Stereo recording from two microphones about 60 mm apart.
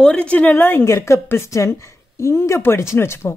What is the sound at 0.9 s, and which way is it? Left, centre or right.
A woman's voice, left.